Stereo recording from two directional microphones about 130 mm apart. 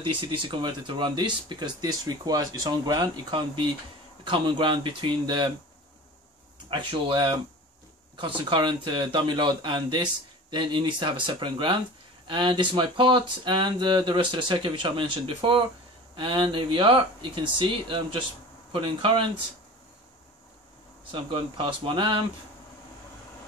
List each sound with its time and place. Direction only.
0.0 s speech: 40° right (ahead or behind)
6.7 s speech: 40° right (ahead or behind)
21.1 s speech: 40° right (ahead or behind)